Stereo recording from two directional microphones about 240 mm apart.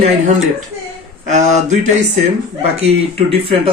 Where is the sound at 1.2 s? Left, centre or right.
Right.